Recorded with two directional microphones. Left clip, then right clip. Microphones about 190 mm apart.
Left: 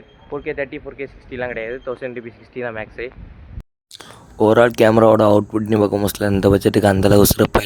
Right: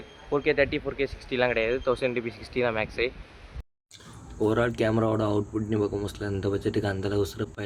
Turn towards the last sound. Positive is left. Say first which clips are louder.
# left 15 dB
turn(degrees=60)  # may be behind; listen again after turning